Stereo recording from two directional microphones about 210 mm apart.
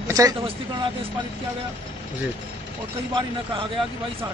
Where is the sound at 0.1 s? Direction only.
15° right (ahead or behind).